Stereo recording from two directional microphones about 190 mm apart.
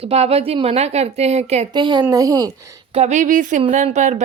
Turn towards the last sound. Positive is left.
turn(degrees=-40)  # may be behind; listen again after turning